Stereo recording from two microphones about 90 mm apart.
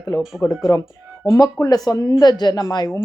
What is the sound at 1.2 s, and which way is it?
A woman's voice, 45° left (ahead or behind).